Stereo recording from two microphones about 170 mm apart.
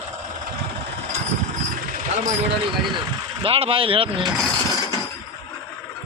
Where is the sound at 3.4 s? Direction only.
35° right (ahead or behind).